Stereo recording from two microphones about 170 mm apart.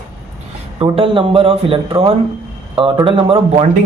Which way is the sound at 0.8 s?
30° right (ahead or behind).